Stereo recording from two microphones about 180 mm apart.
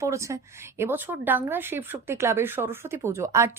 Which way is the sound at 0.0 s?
15° right (ahead or behind).